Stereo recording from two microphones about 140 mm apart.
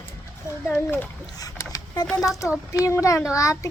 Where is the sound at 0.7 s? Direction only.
15° left (ahead or behind).